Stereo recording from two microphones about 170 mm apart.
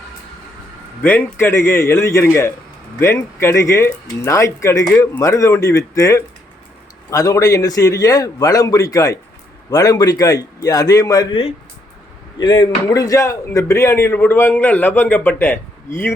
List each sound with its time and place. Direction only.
1.0 s a man's voice: 10° left (ahead or behind)
12.4 s speech: 25° left (ahead or behind)